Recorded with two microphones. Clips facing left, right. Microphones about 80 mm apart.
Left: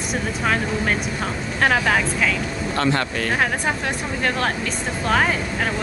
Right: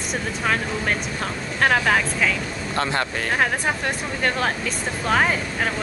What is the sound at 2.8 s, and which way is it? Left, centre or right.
Speech, centre.